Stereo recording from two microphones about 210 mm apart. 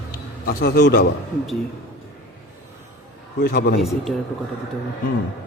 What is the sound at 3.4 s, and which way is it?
Speech, 50° left (ahead or behind).